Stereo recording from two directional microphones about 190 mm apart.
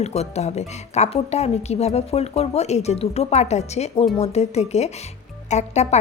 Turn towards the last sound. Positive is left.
turn(degrees=35)  # may be behind; listen again after turning